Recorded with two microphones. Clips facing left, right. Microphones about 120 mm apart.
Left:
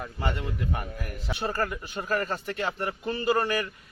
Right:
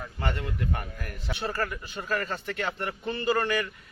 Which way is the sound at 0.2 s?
10° left (ahead or behind).